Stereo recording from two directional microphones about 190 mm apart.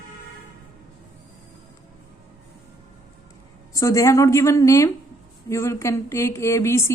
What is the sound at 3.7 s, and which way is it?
A woman's voice, 15° left (ahead or behind).